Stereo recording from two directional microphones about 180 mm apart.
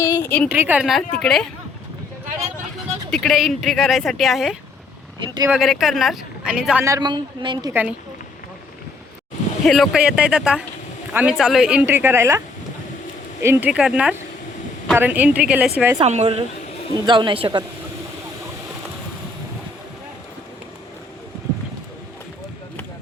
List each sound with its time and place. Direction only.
0.0 s a sound: 15° left (ahead or behind)
0.4 s speech: 10° right (ahead or behind)
2.7 s speech: centre (ahead or behind)
6.8 s a woman's voice: 20° right (ahead or behind)
7.7 s speech: 10° right (ahead or behind)
9.6 s speech: centre (ahead or behind)
13.4 s speech: 10° right (ahead or behind)
16.0 s a woman's voice: 35° right (ahead or behind)